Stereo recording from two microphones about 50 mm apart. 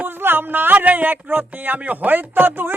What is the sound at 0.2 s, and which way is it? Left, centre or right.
A man's voice, right.